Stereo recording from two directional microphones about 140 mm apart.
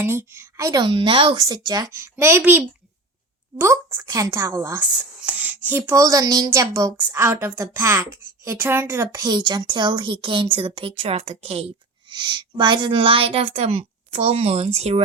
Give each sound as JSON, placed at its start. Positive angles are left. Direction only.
{"t": 0.0, "sound": "a woman's voice", "side_deg": -15}
{"t": 1.4, "sound": "a woman's voice", "side_deg": -25}
{"t": 12.1, "sound": "a woman's voice", "side_deg": -35}